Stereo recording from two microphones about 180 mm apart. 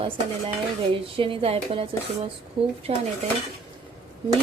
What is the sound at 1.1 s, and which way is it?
A woman's voice, 30° right (ahead or behind).